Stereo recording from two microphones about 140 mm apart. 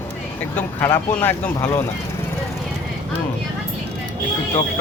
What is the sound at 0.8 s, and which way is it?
Speech, 20° left (ahead or behind).